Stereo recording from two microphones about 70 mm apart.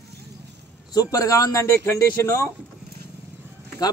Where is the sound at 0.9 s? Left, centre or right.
Left.